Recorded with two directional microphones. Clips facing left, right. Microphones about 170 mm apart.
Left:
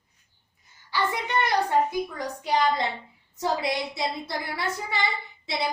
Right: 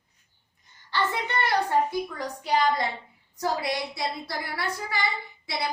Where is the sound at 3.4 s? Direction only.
20° left (ahead or behind).